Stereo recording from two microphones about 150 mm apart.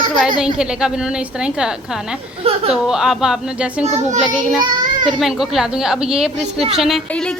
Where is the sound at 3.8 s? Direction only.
45° right (ahead or behind).